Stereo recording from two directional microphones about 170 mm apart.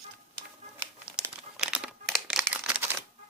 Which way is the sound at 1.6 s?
5° right (ahead or behind).